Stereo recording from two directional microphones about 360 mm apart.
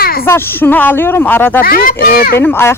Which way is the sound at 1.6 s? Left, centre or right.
Left.